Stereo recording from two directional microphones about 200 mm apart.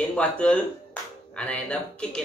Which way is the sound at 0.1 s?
5° left (ahead or behind).